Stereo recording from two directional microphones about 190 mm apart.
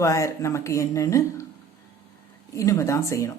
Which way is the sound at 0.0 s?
15° left (ahead or behind).